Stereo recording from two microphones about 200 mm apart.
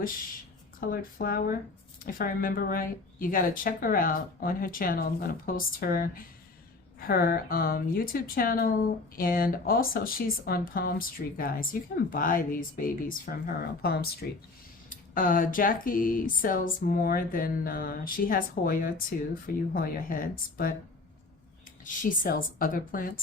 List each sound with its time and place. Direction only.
0.8 s speech: 45° left (ahead or behind)
21.8 s speech: 45° left (ahead or behind)